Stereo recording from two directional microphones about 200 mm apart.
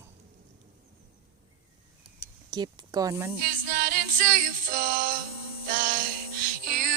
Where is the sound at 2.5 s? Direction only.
20° right (ahead or behind).